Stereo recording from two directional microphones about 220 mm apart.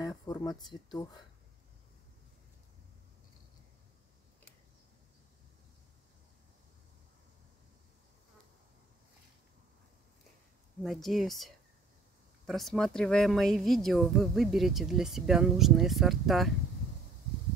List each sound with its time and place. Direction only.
0.0 s a sound: 15° left (ahead or behind)
1.0 s speech: 20° left (ahead or behind)
10.8 s speech: centre (ahead or behind)